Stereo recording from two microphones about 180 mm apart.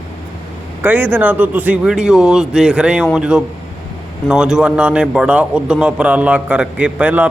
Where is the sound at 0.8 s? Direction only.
10° right (ahead or behind).